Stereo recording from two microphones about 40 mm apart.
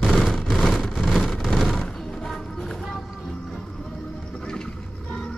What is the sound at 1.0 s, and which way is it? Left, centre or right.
Vehicle, centre.